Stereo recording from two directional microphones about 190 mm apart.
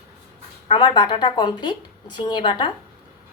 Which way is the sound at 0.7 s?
25° left (ahead or behind).